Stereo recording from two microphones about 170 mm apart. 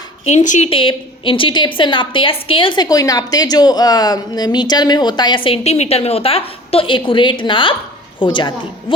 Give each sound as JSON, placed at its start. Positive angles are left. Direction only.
{"t": 0.3, "sound": "speech", "side_deg": 45}
{"t": 0.7, "sound": "a woman's voice", "side_deg": 30}